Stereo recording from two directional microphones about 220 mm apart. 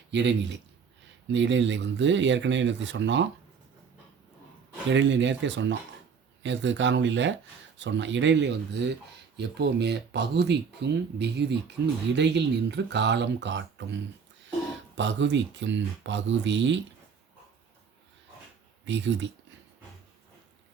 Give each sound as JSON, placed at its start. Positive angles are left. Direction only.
{"t": 0.1, "sound": "speech", "side_deg": -55}
{"t": 4.9, "sound": "speech", "side_deg": -55}
{"t": 14.9, "sound": "speech", "side_deg": -55}
{"t": 18.9, "sound": "speech", "side_deg": -55}